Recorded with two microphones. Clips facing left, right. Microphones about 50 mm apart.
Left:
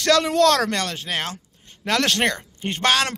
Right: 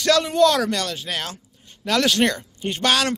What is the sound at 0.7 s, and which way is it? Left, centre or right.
A man's voice, left.